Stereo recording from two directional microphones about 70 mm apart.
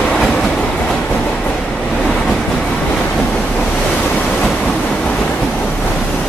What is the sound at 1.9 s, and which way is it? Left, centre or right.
Waves, centre.